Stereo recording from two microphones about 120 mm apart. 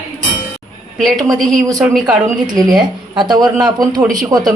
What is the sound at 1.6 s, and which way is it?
Speech, 25° right (ahead or behind).